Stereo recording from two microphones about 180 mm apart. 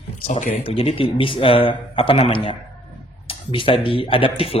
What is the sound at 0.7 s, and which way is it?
Speech, 30° left (ahead or behind).